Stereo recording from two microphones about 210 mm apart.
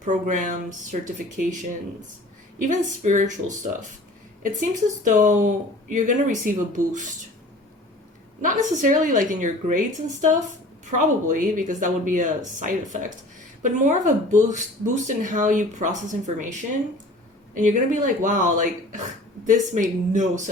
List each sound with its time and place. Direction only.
0.0 s speech: 35° right (ahead or behind)
2.6 s speech: 35° right (ahead or behind)
8.4 s speech: 40° right (ahead or behind)